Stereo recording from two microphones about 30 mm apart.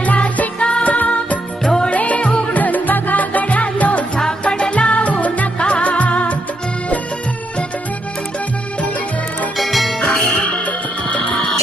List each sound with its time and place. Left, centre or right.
0.0 s music: left
0.6 s music: left
0.9 s music: left
1.6 s music: left
1.9 s music: left
2.6 s music: left
4.4 s music: left
5.5 s music: left
9.6 s music: centre
10.0 s music: left
10.7 s music: left